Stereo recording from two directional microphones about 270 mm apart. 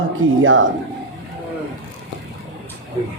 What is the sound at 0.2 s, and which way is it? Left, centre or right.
Speech, right.